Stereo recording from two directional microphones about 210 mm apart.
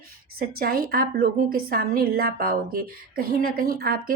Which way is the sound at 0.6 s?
45° right (ahead or behind).